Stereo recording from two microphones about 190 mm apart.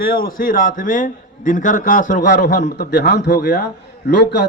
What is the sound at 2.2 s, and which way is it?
Speech, 65° left (ahead or behind).